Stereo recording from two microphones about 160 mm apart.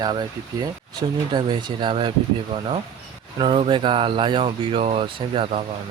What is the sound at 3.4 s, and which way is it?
Speech, 30° right (ahead or behind).